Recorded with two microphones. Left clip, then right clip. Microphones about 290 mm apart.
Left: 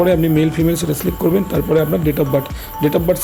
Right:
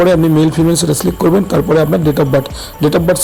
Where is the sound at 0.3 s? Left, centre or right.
Centre.